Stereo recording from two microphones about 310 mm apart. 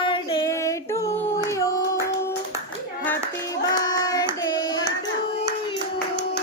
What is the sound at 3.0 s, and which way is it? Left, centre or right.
Hands, centre.